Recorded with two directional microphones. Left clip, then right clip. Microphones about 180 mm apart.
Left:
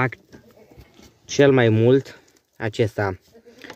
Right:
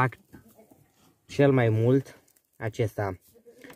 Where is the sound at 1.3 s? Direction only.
20° left (ahead or behind).